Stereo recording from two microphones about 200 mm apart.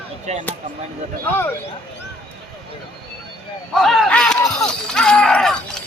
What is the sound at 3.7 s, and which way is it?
Shatter, centre (ahead or behind).